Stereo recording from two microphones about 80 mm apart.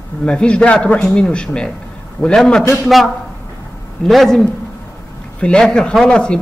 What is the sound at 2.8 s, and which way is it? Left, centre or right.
A man's voice, centre.